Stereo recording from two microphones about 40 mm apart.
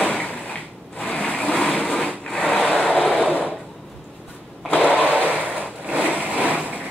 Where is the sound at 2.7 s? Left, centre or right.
Left.